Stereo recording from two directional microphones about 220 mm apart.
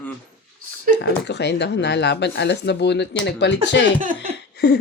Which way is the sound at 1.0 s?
50° left (ahead or behind).